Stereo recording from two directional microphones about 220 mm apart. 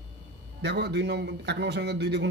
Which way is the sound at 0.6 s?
50° right (ahead or behind).